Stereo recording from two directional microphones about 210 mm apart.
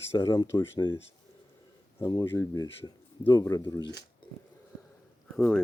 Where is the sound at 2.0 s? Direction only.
15° left (ahead or behind).